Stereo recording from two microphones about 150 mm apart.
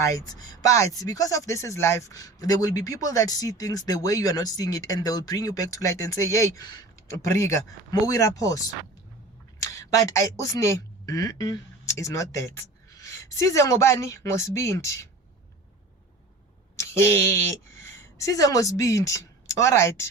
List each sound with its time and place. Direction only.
0.0 s speech: 25° left (ahead or behind)
16.7 s speech: 15° left (ahead or behind)